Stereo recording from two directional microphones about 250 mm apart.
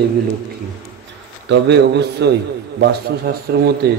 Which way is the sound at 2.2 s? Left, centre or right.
Right.